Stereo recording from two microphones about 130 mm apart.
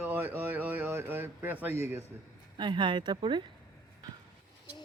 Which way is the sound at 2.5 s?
35° right (ahead or behind).